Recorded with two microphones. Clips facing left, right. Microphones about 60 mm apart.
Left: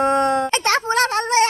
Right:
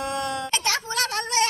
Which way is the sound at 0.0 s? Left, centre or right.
Left.